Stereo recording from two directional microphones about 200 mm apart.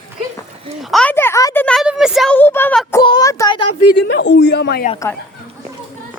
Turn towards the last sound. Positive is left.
turn(degrees=55)  # may be behind; listen again after turning